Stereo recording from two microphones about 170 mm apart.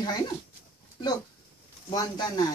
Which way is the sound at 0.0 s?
25° left (ahead or behind).